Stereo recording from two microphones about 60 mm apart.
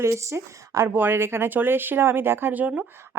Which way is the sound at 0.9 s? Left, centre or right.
Right.